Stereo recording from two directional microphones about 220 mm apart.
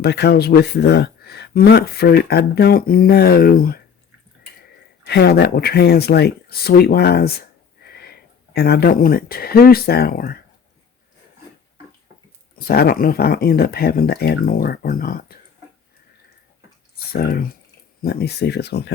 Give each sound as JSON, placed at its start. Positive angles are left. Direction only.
{"t": 0.0, "sound": "speech", "side_deg": 50}
{"t": 5.0, "sound": "speech", "side_deg": 45}
{"t": 7.9, "sound": "sniff", "side_deg": 45}
{"t": 8.5, "sound": "speech", "side_deg": 45}
{"t": 12.5, "sound": "speech", "side_deg": 45}
{"t": 17.1, "sound": "speech", "side_deg": 45}